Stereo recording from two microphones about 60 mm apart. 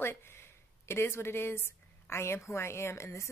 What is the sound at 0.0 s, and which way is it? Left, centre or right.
A woman's voice, left.